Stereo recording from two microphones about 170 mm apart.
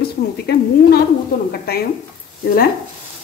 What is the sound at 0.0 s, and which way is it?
A woman's voice, 70° left (ahead or behind).